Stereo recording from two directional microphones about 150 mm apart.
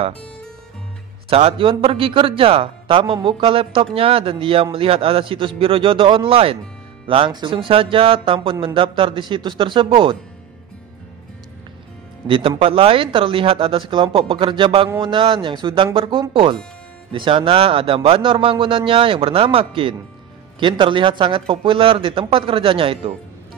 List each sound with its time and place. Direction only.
1.3 s a man's voice: 40° right (ahead or behind)
12.3 s a man's voice: 35° right (ahead or behind)